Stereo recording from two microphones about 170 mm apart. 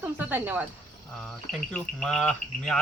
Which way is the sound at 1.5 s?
5° left (ahead or behind).